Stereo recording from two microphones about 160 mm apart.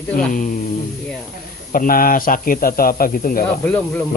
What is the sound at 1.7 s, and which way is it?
Speech, 60° left (ahead or behind).